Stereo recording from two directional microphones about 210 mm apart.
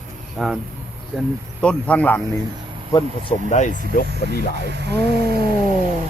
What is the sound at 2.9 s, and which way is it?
Speech, 20° left (ahead or behind).